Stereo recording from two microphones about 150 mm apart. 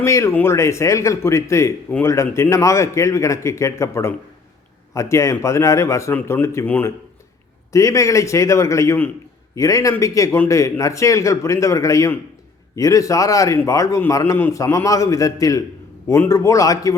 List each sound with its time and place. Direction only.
0.0 s a man's voice: 20° left (ahead or behind)